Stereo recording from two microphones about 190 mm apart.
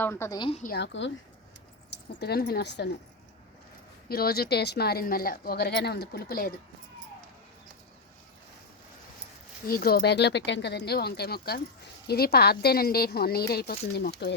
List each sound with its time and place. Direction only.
0.0 s a woman's voice: 15° left (ahead or behind)
0.8 s speech: 75° left (ahead or behind)
2.2 s speech: 55° left (ahead or behind)
4.1 s speech: 55° left (ahead or behind)
9.6 s speech: 50° left (ahead or behind)